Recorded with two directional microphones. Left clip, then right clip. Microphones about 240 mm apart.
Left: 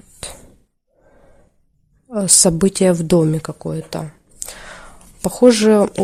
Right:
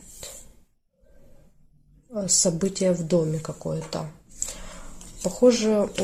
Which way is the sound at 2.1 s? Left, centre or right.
Left.